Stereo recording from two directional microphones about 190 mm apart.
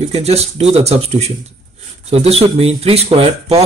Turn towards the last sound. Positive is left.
turn(degrees=-30)  # may be behind; listen again after turning